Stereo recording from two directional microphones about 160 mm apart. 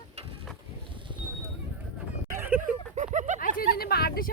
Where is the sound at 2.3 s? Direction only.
15° right (ahead or behind).